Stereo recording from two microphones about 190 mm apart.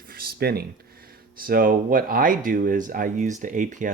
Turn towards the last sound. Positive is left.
turn(degrees=-40)  # may be behind; listen again after turning